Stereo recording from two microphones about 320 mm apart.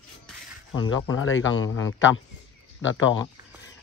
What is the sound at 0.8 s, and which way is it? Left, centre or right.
Speech, left.